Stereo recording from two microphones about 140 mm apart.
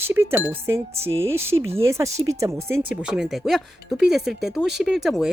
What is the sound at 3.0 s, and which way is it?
Speech, 5° right (ahead or behind).